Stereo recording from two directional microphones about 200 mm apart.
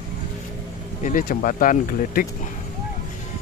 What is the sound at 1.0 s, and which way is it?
Speech, 45° left (ahead or behind).